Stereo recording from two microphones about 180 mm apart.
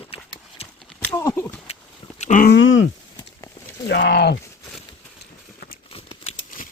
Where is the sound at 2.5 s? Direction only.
90° left.